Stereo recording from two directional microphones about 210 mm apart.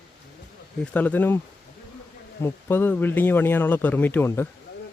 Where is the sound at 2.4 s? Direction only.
10° left (ahead or behind).